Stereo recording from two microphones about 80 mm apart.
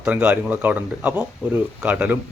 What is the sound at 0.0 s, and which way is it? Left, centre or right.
Speech, centre.